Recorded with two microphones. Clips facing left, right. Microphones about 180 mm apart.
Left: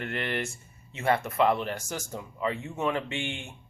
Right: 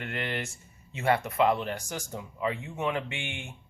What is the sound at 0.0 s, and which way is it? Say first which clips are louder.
Speech: left 2 dB; 20° right (ahead or behind).